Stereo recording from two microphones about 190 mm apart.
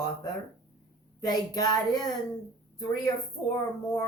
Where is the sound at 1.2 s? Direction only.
20° left (ahead or behind).